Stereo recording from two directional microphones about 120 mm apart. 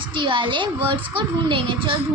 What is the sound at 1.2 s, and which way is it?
Speech, 45° right (ahead or behind).